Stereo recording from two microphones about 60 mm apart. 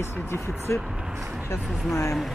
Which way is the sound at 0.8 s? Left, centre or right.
Centre.